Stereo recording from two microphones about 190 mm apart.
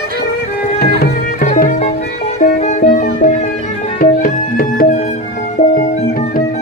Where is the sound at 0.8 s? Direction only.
55° left (ahead or behind).